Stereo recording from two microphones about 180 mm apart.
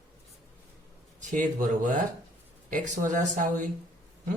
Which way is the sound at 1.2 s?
45° right (ahead or behind).